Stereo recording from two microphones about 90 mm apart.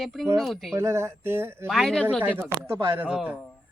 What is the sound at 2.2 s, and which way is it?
Speech, 20° right (ahead or behind).